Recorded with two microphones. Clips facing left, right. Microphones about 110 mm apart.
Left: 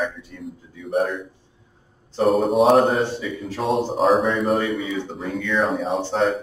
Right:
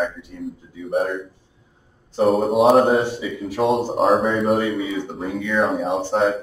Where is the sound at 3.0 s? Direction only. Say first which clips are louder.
Right 1 dB; 15° right (ahead or behind).